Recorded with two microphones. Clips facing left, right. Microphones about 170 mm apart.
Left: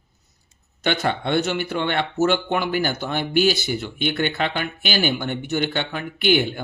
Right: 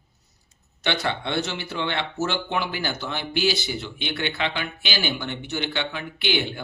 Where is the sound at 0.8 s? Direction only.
50° left (ahead or behind).